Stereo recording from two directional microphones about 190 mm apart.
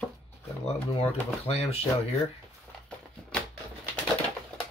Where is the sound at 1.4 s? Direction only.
30° left (ahead or behind).